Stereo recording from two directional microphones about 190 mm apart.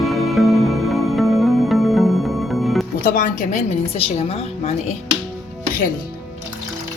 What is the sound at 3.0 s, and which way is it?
A woman's voice, 45° left (ahead or behind).